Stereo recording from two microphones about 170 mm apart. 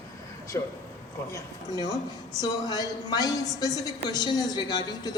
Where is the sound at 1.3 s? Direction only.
20° left (ahead or behind).